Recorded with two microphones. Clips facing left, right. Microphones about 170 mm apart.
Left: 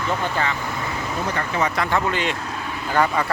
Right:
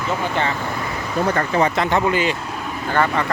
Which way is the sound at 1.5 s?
25° right (ahead or behind).